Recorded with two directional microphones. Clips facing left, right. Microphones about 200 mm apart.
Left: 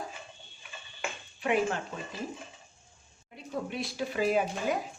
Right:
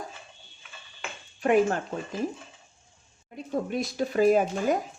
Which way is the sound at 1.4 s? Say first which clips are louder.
Right 6 dB; 45° right (ahead or behind).